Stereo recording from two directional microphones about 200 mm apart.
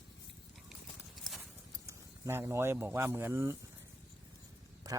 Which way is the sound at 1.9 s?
15° right (ahead or behind).